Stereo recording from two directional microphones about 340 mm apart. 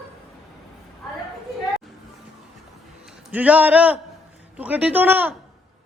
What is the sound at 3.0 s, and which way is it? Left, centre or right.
A man's voice, centre.